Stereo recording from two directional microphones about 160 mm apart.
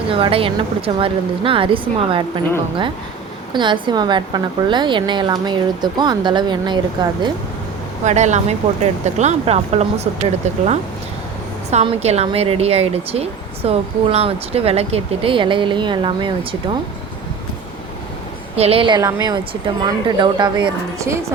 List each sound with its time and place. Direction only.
0.1 s speech: 35° right (ahead or behind)
3.5 s a woman's voice: 30° right (ahead or behind)
8.0 s speech: 45° right (ahead or behind)
11.7 s speech: 45° right (ahead or behind)
18.5 s a woman's voice: 40° right (ahead or behind)